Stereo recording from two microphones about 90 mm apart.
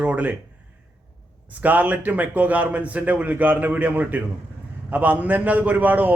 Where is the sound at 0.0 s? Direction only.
15° right (ahead or behind).